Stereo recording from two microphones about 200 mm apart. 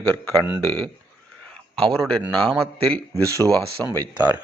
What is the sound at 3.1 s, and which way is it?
Speech, 15° right (ahead or behind).